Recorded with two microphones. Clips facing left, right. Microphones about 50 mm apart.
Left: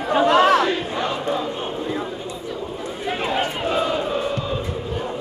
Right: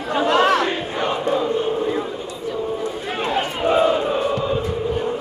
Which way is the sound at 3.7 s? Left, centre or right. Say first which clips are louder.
Right 7 dB; right.